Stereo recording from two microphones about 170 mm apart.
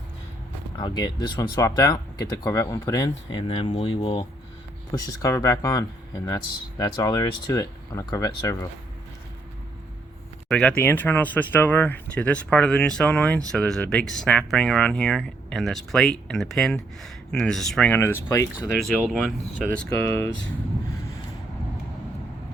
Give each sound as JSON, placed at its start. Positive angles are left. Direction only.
{"t": 0.8, "sound": "speech", "side_deg": 25}
{"t": 4.9, "sound": "speech", "side_deg": 20}
{"t": 10.5, "sound": "speech", "side_deg": 5}
{"t": 18.8, "sound": "speech", "side_deg": 0}